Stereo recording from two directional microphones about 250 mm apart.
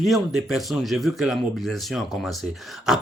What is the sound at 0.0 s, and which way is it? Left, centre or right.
A man's voice, centre.